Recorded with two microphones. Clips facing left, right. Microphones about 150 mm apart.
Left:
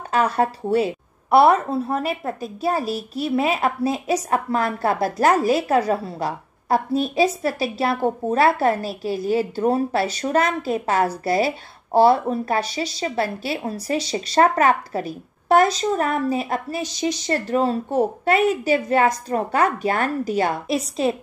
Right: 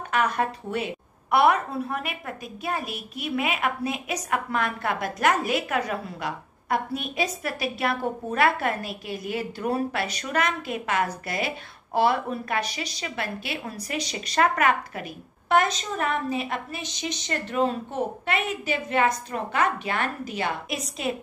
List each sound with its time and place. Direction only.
0.1 s a woman's voice: 30° left (ahead or behind)